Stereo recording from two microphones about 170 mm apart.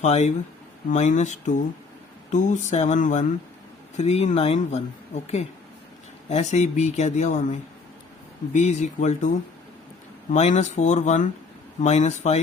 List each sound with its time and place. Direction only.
0.0 s speech: 40° left (ahead or behind)